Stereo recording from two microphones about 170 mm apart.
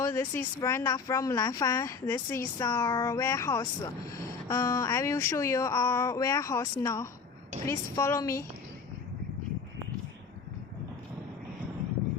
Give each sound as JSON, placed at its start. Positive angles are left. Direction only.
{"t": 0.0, "sound": "speech", "side_deg": 15}